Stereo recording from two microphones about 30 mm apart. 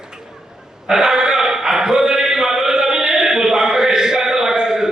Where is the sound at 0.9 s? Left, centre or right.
Centre.